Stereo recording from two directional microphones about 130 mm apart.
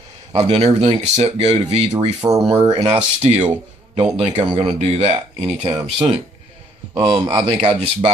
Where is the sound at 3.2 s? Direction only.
55° right (ahead or behind).